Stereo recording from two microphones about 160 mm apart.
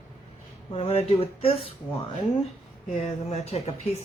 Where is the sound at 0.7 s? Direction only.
40° left (ahead or behind).